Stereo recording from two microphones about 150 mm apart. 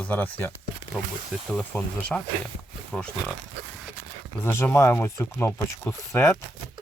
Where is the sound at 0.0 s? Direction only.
10° left (ahead or behind).